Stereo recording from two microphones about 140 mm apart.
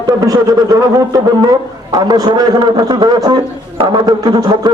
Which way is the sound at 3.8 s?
30° right (ahead or behind).